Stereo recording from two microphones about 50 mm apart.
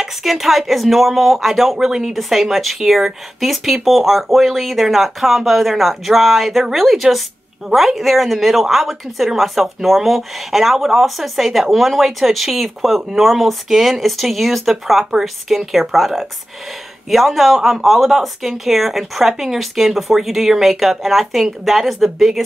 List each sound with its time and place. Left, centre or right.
0.0 s speech: centre